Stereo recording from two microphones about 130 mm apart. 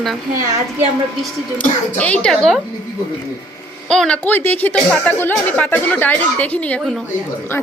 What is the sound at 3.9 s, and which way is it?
A woman's voice, 5° left (ahead or behind).